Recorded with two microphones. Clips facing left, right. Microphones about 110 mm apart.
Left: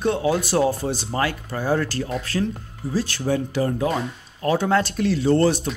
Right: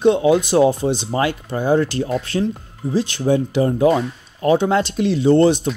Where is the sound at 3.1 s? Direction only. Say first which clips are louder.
Right 5 dB; 20° right (ahead or behind).